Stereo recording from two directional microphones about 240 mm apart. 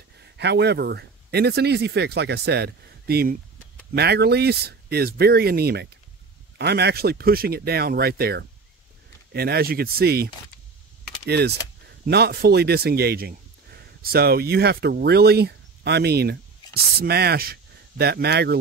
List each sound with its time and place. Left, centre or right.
0.2 s speech: right